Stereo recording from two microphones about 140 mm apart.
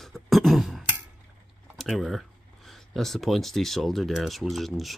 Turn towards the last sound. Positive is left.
turn(degrees=0)  # may be behind; listen again after turning